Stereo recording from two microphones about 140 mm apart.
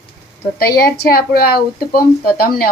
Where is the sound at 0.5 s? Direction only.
90° left.